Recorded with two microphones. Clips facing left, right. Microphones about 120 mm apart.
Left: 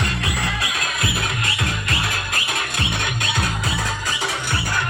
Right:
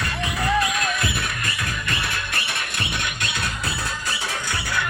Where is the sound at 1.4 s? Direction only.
90° left.